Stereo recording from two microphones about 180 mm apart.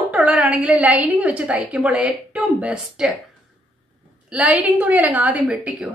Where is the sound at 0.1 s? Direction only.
5° right (ahead or behind).